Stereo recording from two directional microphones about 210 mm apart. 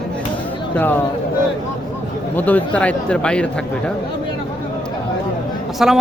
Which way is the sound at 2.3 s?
10° left (ahead or behind).